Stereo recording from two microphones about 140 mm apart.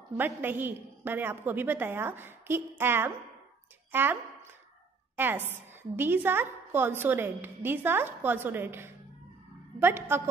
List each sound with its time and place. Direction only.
0.2 s a woman's voice: 15° right (ahead or behind)